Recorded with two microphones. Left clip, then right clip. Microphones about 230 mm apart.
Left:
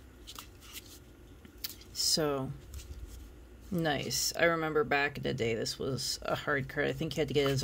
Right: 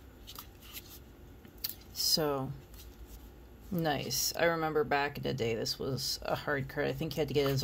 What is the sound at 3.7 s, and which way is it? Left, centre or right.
Speech, centre.